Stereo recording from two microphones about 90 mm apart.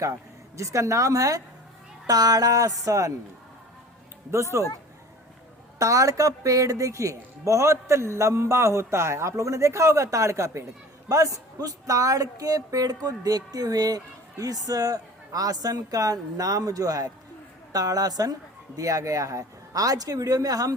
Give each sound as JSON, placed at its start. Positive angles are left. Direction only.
{"t": 0.5, "sound": "speech", "side_deg": -35}
{"t": 4.5, "sound": "speech", "side_deg": -35}
{"t": 5.8, "sound": "speech", "side_deg": -35}